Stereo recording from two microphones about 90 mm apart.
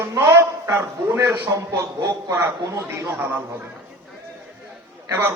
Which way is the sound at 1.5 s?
40° right (ahead or behind).